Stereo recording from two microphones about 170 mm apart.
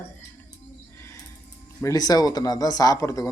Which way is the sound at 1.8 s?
20° left (ahead or behind).